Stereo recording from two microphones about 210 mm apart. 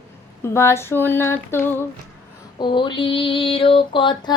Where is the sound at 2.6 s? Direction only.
20° left (ahead or behind).